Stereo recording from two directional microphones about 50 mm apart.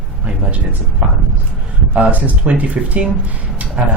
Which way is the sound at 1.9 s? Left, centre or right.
Right.